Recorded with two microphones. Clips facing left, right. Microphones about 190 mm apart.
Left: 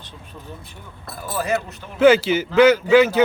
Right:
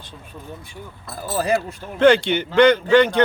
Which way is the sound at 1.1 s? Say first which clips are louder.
Right 3 dB; 35° right (ahead or behind).